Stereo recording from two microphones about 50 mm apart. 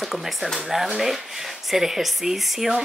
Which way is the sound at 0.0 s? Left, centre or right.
Centre.